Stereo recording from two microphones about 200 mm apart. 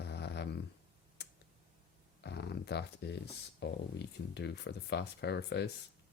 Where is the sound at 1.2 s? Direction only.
55° left (ahead or behind).